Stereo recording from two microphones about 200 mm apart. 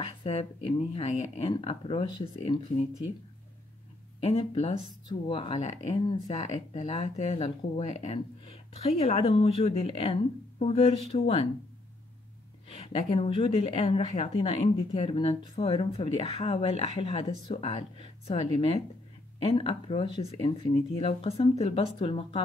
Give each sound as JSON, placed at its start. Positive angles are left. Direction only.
{"t": 0.0, "sound": "speech", "side_deg": 30}
{"t": 4.4, "sound": "speech", "side_deg": 30}
{"t": 12.6, "sound": "speech", "side_deg": 30}